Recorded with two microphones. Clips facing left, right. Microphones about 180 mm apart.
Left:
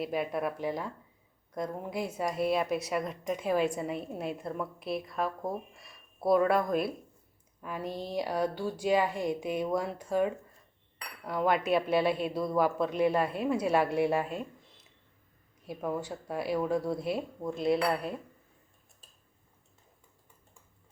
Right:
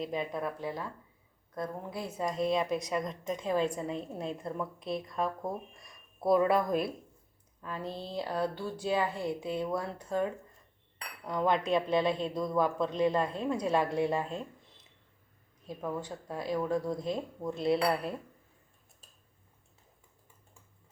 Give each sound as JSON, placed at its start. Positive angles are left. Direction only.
{"t": 0.0, "sound": "a woman's voice", "side_deg": 10}
{"t": 7.6, "sound": "a woman's voice", "side_deg": 15}
{"t": 15.6, "sound": "a woman's voice", "side_deg": 10}